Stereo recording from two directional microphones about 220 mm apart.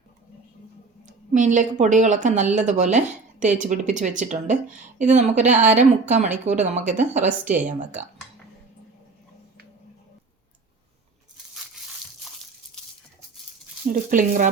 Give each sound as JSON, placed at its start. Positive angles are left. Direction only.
{"t": 1.0, "sound": "a woman's voice", "side_deg": -35}
{"t": 13.8, "sound": "a woman's voice", "side_deg": -40}